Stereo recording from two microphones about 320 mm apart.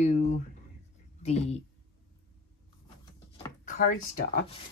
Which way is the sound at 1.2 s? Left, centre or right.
Centre.